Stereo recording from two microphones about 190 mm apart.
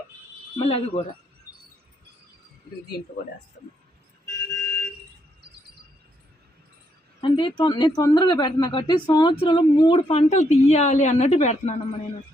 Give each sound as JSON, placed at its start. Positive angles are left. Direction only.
{"t": 0.6, "sound": "speech", "side_deg": 30}
{"t": 4.5, "sound": "a sound", "side_deg": 10}
{"t": 7.2, "sound": "speech", "side_deg": 25}